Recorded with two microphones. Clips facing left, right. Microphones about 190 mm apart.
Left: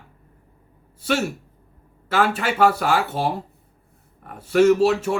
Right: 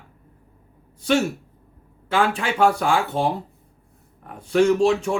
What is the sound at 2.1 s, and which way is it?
Speech, 5° left (ahead or behind).